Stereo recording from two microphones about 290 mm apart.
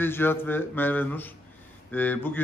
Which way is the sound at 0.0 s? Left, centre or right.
Centre.